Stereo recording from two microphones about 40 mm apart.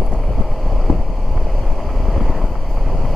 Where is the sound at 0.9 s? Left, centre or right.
Left.